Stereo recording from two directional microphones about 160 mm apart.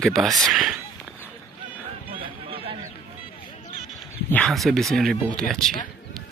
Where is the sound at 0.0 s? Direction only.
Centre (ahead or behind).